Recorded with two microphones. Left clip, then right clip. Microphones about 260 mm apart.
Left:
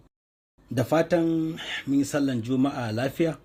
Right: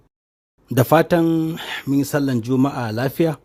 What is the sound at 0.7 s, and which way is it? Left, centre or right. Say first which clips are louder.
Speech: right 7 dB; right.